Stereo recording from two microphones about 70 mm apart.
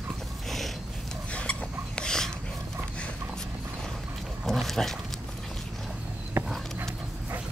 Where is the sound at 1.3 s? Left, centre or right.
Centre.